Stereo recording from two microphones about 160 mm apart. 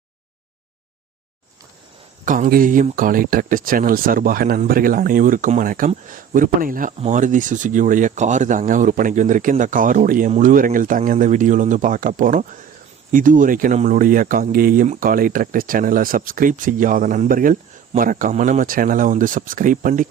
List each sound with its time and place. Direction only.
2.2 s speech: 55° right (ahead or behind)